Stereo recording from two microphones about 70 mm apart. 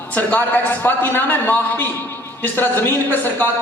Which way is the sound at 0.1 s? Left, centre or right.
Left.